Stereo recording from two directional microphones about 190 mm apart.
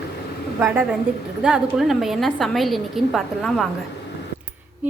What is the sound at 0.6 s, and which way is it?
A woman's voice, 5° right (ahead or behind).